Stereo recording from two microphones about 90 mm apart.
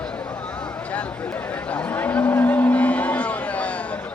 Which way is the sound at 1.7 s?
15° left (ahead or behind).